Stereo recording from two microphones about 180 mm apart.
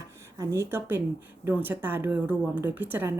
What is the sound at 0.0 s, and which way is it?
Speech, 15° right (ahead or behind).